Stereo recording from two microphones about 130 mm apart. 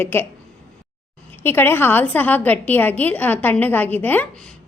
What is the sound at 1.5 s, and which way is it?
A woman's voice, 15° left (ahead or behind).